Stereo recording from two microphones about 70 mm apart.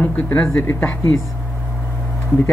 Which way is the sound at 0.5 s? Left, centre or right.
Left.